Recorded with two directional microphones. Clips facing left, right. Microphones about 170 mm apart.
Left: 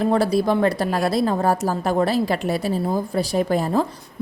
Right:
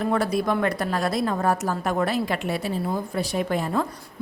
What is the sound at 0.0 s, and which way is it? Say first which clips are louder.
A woman's voice: left 4 dB; 30° left (ahead or behind).